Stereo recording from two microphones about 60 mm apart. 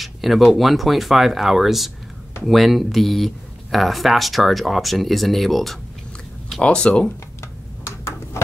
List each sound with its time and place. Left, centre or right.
0.0 s speech: centre
6.6 s speech: centre